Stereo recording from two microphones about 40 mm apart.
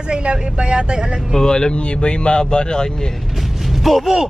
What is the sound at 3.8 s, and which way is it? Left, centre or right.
Speech, centre.